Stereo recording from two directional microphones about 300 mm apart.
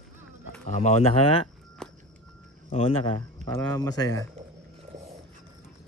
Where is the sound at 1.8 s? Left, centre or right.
Centre.